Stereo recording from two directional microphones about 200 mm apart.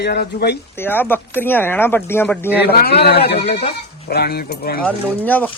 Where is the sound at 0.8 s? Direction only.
10° left (ahead or behind).